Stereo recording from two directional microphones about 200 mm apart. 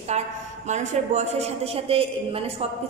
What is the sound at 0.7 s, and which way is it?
A man's voice, 35° right (ahead or behind).